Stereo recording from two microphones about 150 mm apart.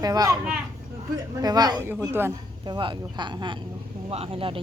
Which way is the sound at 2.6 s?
30° right (ahead or behind).